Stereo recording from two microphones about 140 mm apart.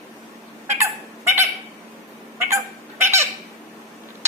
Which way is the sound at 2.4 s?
20° right (ahead or behind).